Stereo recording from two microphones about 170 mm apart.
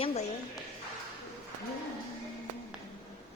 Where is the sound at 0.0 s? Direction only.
40° left (ahead or behind).